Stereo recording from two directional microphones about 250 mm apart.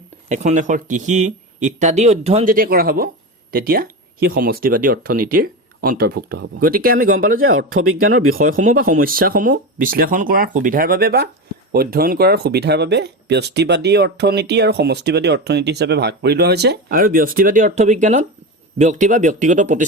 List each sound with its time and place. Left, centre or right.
0.3 s speech: right
7.5 s speech: right
8.5 s speech: right